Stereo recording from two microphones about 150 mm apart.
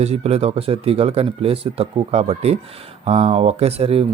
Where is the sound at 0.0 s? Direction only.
45° right (ahead or behind).